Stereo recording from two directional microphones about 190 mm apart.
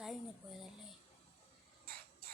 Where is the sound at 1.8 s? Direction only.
50° right (ahead or behind).